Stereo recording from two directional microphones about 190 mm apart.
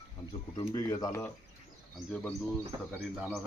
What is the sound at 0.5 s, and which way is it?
Speech, 20° left (ahead or behind).